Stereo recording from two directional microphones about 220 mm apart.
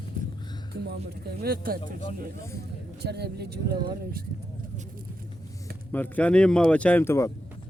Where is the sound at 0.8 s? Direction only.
45° right (ahead or behind).